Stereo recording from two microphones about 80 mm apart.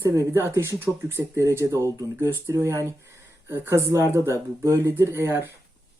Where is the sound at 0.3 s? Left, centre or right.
Right.